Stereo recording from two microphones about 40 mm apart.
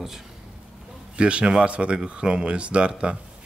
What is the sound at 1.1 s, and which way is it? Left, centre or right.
Speech, right.